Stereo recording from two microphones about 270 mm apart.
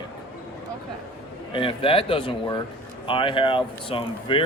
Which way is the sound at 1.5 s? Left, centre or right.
Centre.